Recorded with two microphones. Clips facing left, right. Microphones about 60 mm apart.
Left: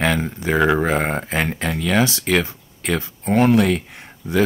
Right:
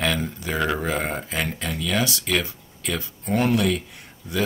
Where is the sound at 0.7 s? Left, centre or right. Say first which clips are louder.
Left 6 dB; left.